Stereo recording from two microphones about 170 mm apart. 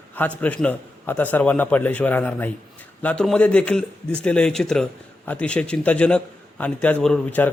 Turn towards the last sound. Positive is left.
turn(degrees=5)  # may be behind; listen again after turning